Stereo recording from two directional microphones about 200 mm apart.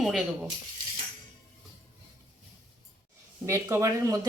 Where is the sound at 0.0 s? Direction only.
Centre (ahead or behind).